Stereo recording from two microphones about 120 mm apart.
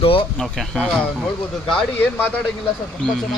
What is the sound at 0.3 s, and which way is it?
Speech, centre (ahead or behind).